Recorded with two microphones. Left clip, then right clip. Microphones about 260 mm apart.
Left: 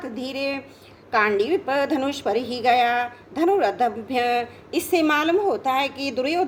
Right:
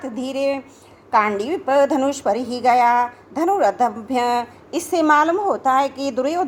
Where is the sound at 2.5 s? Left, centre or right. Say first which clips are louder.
Right 3 dB; right.